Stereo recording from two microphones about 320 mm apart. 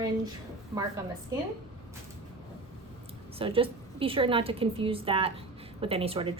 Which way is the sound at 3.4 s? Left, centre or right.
Centre.